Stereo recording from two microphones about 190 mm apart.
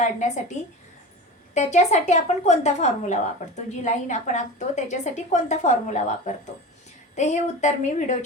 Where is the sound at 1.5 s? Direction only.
35° left (ahead or behind).